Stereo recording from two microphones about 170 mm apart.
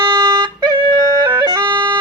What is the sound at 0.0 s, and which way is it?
Music, 25° right (ahead or behind).